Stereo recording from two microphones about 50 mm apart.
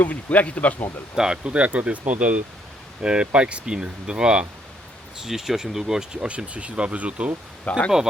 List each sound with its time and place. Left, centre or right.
0.0 s speech: left
1.1 s speech: centre
1.5 s speech: right
5.2 s speech: centre
6.1 s speech: right
7.6 s speech: left